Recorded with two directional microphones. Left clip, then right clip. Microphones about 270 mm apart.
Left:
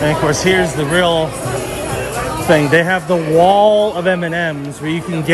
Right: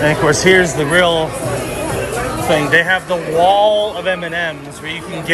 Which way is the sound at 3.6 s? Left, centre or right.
Left.